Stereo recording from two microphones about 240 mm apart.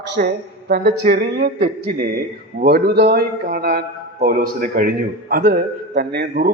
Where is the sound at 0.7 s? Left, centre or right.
Right.